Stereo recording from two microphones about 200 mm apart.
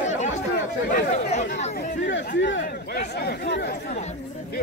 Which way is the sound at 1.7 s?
60° left (ahead or behind).